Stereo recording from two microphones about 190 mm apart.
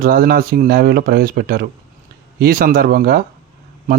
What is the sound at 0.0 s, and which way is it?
Speech, 50° right (ahead or behind).